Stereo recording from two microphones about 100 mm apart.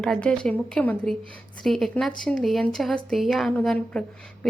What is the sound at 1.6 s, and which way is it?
A woman's voice, centre (ahead or behind).